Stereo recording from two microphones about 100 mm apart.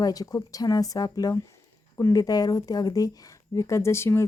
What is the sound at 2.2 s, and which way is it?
Speech, 40° left (ahead or behind).